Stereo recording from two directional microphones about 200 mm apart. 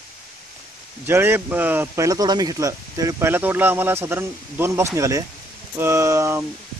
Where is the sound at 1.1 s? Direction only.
10° right (ahead or behind).